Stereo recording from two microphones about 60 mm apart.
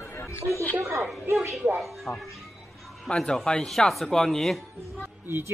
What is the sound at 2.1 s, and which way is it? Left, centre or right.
Speech, centre.